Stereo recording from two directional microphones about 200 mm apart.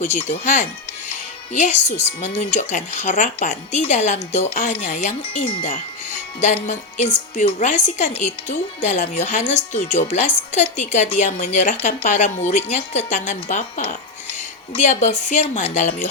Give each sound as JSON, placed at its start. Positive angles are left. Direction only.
{"t": 0.0, "sound": "speech", "side_deg": 35}